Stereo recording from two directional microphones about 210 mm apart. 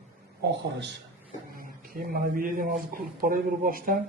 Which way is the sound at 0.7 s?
55° right (ahead or behind).